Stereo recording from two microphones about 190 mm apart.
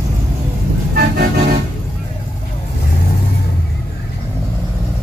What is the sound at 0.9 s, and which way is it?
Vehicle, 55° right (ahead or behind).